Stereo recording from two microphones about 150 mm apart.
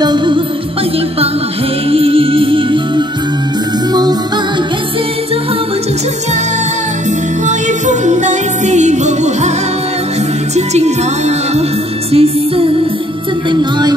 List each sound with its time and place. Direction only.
0.0 s music: 30° right (ahead or behind)
1.9 s music: 40° right (ahead or behind)
7.4 s music: 50° right (ahead or behind)
10.5 s speech: 50° right (ahead or behind)
12.1 s music: 40° right (ahead or behind)